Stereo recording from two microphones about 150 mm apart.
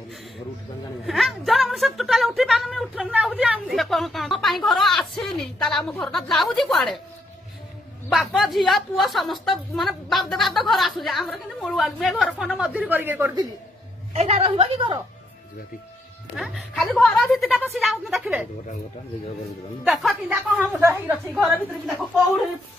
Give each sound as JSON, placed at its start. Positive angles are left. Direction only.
{"t": 1.0, "sound": "a woman's voice", "side_deg": 0}
{"t": 8.1, "sound": "a woman's voice", "side_deg": 0}
{"t": 14.1, "sound": "a woman's voice", "side_deg": -40}
{"t": 16.5, "sound": "a woman's voice", "side_deg": 5}
{"t": 19.8, "sound": "a woman's voice", "side_deg": 0}
{"t": 20.4, "sound": "a woman's voice", "side_deg": -10}
{"t": 21.5, "sound": "a woman's voice", "side_deg": 0}